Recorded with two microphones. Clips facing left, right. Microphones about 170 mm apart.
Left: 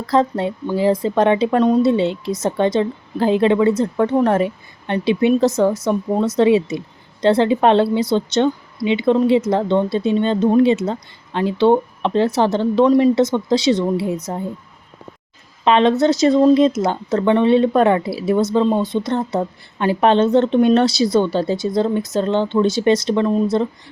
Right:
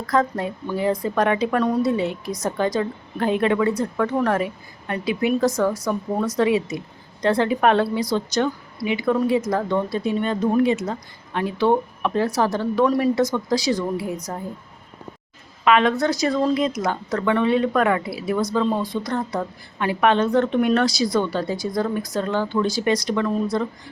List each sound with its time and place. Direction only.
0.1 s a woman's voice: 30° left (ahead or behind)
15.6 s a woman's voice: 30° left (ahead or behind)